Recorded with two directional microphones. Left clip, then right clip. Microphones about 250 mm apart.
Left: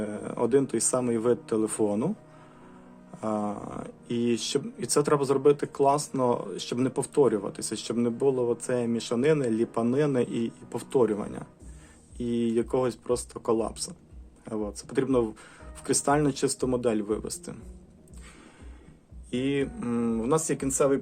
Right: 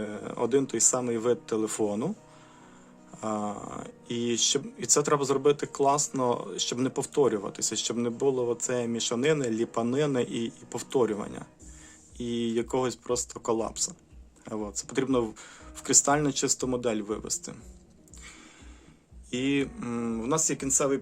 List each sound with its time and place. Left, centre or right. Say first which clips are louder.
0.0 s speech: left 2 dB; centre
3.2 s speech: left 2 dB; centre
19.3 s speech: even; centre